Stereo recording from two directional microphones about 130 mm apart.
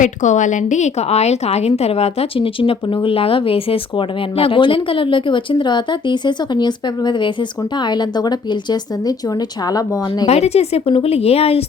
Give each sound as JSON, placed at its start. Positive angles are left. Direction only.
{"t": 0.0, "sound": "a woman's voice", "side_deg": 70}
{"t": 10.2, "sound": "a woman's voice", "side_deg": 55}